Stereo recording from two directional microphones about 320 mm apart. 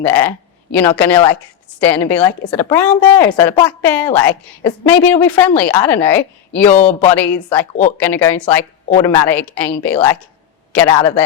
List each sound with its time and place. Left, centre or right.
0.0 s speech: centre
5.1 s speech: centre
6.7 s speech: left
7.1 s speech: centre